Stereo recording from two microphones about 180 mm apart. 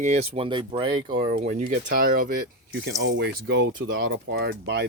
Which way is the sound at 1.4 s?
45° right (ahead or behind).